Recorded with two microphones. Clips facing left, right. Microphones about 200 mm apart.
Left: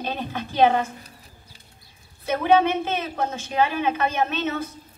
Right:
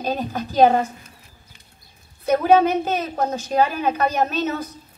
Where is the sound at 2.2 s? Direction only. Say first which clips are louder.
Right 3 dB; 40° right (ahead or behind).